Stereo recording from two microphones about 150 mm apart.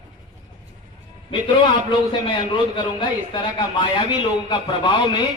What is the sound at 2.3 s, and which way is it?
A man's voice, 35° left (ahead or behind).